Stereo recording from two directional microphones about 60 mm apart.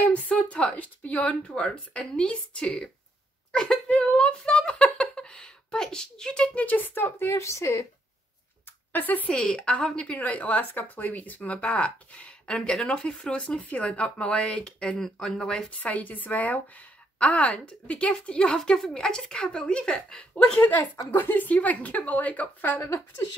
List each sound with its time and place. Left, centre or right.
0.1 s a woman's voice: left
1.5 s speech: centre
6.6 s speech: left
7.4 s speech: left
8.9 s a woman's voice: left
9.3 s a woman's voice: centre
15.0 s speech: centre
15.8 s a woman's voice: left
21.1 s a woman's voice: left
22.8 s speech: left